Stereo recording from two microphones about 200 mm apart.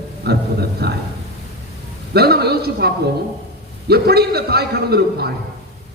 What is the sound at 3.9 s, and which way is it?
A man's voice, 50° right (ahead or behind).